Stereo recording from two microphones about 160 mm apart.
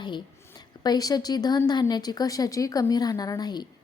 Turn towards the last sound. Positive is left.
turn(degrees=25)  # may be behind; listen again after turning